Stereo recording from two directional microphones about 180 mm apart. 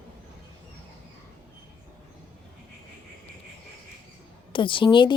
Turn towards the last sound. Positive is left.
turn(degrees=25)  # may be behind; listen again after turning